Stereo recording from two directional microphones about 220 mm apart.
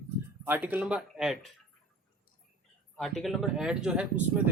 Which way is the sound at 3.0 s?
Centre (ahead or behind).